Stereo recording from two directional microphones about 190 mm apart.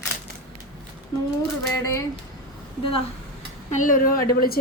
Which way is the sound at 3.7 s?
45° left (ahead or behind).